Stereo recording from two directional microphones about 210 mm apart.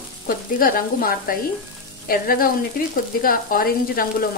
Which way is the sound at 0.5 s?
45° left (ahead or behind).